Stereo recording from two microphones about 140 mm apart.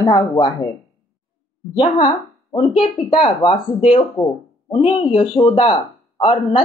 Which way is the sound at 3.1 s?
30° left (ahead or behind).